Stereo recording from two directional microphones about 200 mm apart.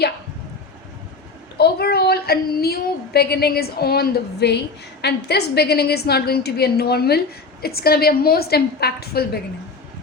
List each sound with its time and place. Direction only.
1.5 s a woman's voice: 50° left (ahead or behind)